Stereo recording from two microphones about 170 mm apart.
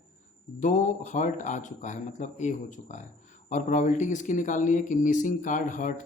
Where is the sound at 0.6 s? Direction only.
45° left (ahead or behind).